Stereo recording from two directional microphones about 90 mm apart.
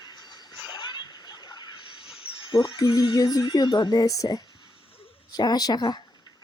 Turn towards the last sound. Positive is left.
turn(degrees=50)  # may be behind; listen again after turning